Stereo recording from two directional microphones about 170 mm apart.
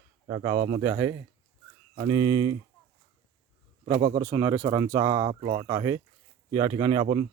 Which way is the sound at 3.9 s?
35° right (ahead or behind).